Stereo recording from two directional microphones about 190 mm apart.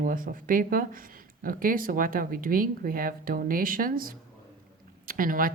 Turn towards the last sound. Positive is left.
turn(degrees=-50)  # may be behind; listen again after turning